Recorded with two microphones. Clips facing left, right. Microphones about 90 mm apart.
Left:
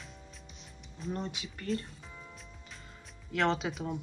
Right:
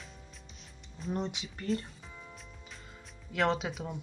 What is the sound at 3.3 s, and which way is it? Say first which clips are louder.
Speech: even; 5° right (ahead or behind).